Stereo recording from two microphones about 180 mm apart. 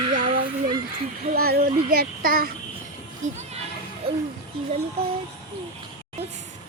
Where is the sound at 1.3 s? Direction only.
60° right (ahead or behind).